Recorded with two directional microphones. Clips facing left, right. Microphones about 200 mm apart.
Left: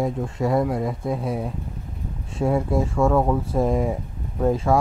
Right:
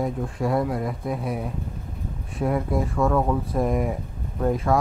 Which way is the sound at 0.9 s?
25° left (ahead or behind).